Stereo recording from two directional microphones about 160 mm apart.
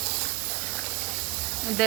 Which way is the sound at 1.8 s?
Centre (ahead or behind).